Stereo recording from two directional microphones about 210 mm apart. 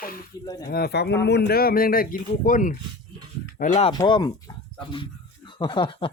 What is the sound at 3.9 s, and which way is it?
Speech, 20° left (ahead or behind).